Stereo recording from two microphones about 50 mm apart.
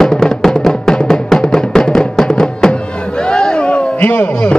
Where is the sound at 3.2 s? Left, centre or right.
Centre.